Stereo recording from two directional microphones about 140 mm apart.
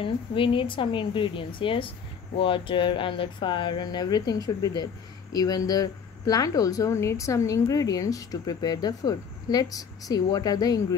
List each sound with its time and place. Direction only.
0.0 s a woman's voice: 35° left (ahead or behind)